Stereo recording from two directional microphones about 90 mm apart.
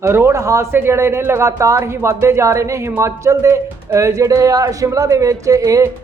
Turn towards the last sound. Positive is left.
turn(degrees=-40)  # may be behind; listen again after turning